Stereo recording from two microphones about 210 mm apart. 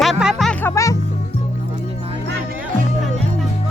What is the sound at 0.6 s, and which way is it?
Music, 15° left (ahead or behind).